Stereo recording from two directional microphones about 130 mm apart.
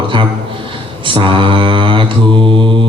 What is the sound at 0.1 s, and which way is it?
Mantra, 40° right (ahead or behind).